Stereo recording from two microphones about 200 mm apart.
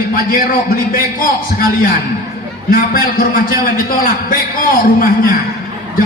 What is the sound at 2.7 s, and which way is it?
A man's voice, 45° left (ahead or behind).